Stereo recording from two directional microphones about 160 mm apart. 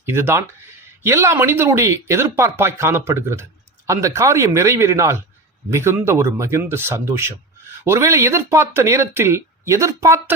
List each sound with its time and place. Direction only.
0.0 s speech: 15° right (ahead or behind)